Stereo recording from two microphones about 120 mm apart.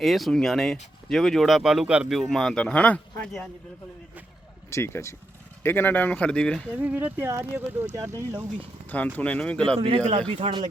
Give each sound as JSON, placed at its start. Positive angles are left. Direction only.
{"t": 0.0, "sound": "speech", "side_deg": 0}
{"t": 4.7, "sound": "speech", "side_deg": 20}
{"t": 6.7, "sound": "speech", "side_deg": -15}
{"t": 8.9, "sound": "speech", "side_deg": 15}
{"t": 9.7, "sound": "speech", "side_deg": -50}
{"t": 10.0, "sound": "a man's voice", "side_deg": -70}
{"t": 10.2, "sound": "speech", "side_deg": -45}